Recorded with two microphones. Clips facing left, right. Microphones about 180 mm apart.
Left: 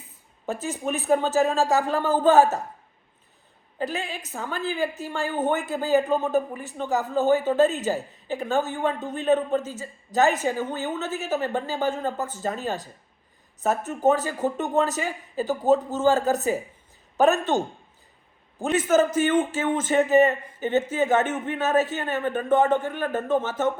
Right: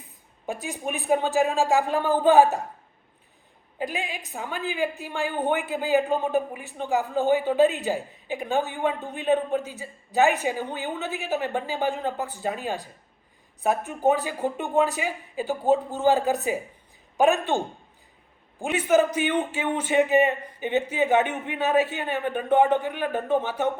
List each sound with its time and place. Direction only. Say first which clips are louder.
0.4 s speech: left 2 dB; 10° right (ahead or behind)
3.8 s speech: left 1 dB; 10° right (ahead or behind)
15.4 s speech: left 1 dB; 40° left (ahead or behind)
16.0 s speech: left 1 dB; 15° right (ahead or behind)
18.6 s speech: left 1 dB; 15° right (ahead or behind)